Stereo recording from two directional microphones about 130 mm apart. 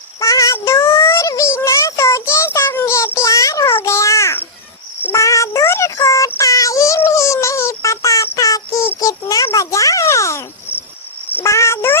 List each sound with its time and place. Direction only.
0.2 s child singing: 25° left (ahead or behind)
5.0 s synthetic singing: 25° left (ahead or behind)
11.3 s cricket: 20° left (ahead or behind)